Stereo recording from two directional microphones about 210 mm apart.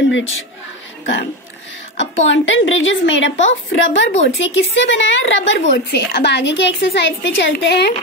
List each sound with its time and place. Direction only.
0.1 s a woman's voice: 65° left (ahead or behind)
2.0 s a woman's voice: 65° left (ahead or behind)